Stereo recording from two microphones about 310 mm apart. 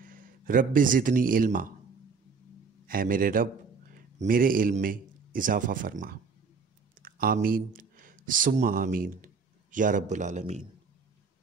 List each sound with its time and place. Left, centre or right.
0.0 s speech: right
2.9 s a man's voice: right